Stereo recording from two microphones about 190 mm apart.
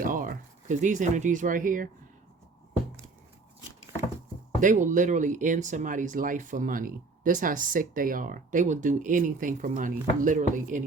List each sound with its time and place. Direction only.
0.0 s speech: 45° right (ahead or behind)
4.6 s speech: 40° right (ahead or behind)